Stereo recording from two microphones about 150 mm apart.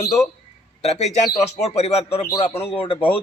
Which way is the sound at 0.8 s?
45° left (ahead or behind).